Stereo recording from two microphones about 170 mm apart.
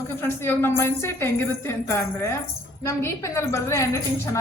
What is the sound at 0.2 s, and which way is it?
A woman's voice, 15° left (ahead or behind).